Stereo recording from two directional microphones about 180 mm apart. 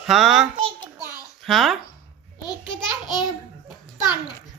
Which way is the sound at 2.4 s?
25° left (ahead or behind).